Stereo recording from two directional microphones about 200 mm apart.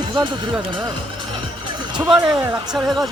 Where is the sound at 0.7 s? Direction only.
20° right (ahead or behind).